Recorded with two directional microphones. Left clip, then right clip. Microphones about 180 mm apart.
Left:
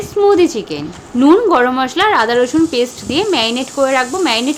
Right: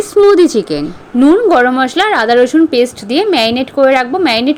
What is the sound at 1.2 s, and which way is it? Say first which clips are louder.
Speech: right 2 dB; 15° right (ahead or behind).